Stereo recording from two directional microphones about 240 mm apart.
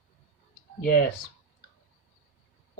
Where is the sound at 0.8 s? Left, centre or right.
Left.